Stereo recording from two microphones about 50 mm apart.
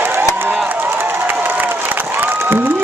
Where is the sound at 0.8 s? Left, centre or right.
Right.